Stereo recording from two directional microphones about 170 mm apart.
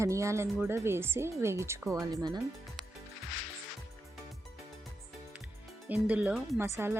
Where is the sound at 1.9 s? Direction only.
20° right (ahead or behind).